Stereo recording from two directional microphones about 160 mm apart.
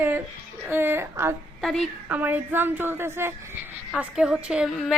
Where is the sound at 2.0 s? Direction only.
10° right (ahead or behind).